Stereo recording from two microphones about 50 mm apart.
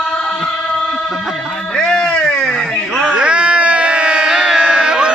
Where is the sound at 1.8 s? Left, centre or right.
Centre.